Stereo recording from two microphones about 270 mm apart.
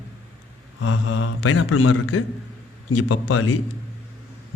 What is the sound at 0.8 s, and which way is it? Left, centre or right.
A man's voice, left.